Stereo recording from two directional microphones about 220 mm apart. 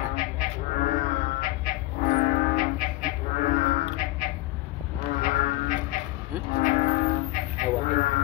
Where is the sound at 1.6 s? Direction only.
40° left (ahead or behind).